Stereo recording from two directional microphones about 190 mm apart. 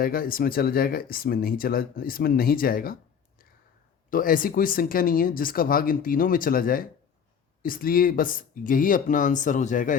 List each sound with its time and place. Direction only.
0.0 s speech: 50° left (ahead or behind)
4.1 s speech: 50° left (ahead or behind)